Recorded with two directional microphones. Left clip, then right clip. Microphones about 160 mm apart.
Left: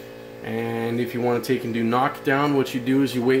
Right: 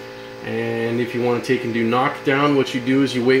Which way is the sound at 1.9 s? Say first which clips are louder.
Right 2 dB; 30° left (ahead or behind).